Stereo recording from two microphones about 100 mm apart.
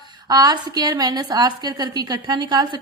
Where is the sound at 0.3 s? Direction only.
40° right (ahead or behind).